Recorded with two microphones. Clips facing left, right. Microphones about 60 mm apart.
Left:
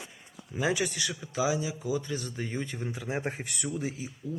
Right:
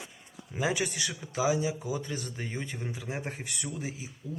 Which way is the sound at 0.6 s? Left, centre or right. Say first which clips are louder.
Left 1 dB; centre.